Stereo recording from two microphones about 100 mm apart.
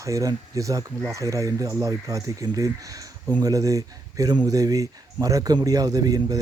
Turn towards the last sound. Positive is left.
turn(degrees=-40)  # may be behind; listen again after turning